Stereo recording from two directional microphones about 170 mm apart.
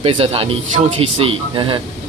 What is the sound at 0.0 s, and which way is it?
Speech, 35° right (ahead or behind).